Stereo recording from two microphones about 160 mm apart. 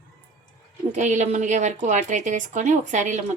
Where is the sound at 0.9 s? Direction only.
45° right (ahead or behind).